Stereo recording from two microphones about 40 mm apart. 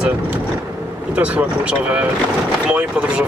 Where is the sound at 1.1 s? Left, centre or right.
Right.